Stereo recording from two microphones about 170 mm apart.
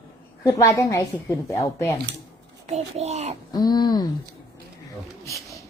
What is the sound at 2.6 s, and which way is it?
Speech, 40° right (ahead or behind).